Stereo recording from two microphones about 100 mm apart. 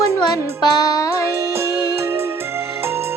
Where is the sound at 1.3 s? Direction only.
25° right (ahead or behind).